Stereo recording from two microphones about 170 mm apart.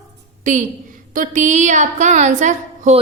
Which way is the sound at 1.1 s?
50° right (ahead or behind).